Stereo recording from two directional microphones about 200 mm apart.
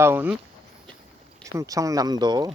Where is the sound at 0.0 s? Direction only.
10° right (ahead or behind).